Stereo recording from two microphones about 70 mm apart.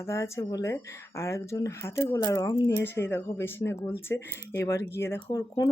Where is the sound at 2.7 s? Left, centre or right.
Left.